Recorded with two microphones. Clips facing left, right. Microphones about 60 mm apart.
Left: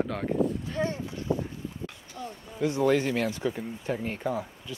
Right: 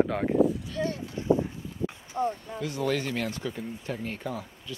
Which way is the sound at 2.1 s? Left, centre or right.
Right.